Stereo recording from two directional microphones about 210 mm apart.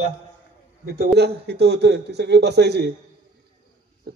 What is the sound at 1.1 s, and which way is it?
Speech, 50° right (ahead or behind).